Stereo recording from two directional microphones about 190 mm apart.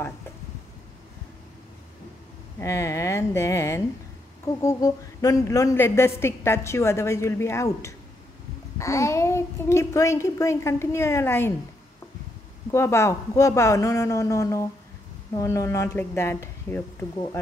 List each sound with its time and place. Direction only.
2.6 s a woman's voice: 15° left (ahead or behind)
12.7 s a woman's voice: 15° left (ahead or behind)